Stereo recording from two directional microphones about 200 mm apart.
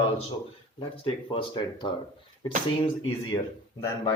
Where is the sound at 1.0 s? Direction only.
25° left (ahead or behind).